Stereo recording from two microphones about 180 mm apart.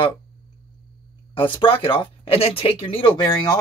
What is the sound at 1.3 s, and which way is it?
Speech, 30° left (ahead or behind).